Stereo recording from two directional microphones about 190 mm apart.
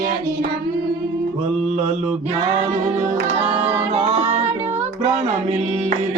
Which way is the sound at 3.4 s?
35° right (ahead or behind).